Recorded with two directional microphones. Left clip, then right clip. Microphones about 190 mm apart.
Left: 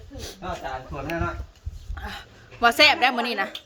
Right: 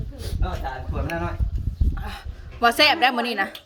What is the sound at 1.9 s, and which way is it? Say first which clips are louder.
Dog: left 2 dB; centre (ahead or behind).